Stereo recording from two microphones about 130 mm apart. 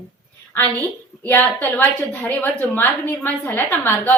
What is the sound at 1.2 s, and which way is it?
A woman's voice, 15° left (ahead or behind).